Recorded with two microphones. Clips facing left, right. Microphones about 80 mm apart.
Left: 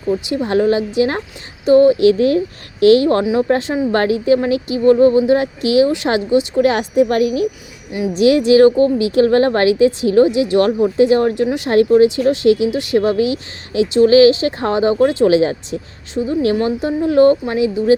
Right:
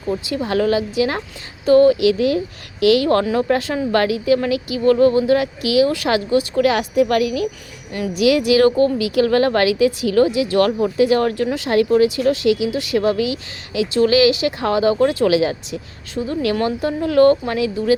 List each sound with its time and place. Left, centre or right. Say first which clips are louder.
0.3 s speech: left 3 dB; left
2.0 s speech: left 4 dB; left
3.2 s speech: left 3 dB; centre; by 15.8 s left
16.1 s speech: left 4 dB; left